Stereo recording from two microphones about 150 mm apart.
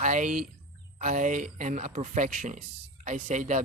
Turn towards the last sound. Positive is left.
turn(degrees=-55)  # may be behind; listen again after turning